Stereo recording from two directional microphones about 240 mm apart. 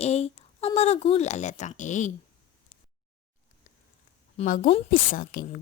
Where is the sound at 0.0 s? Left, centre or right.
Left.